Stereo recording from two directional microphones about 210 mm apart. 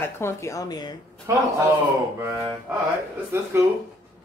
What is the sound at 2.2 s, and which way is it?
Speech, 10° right (ahead or behind).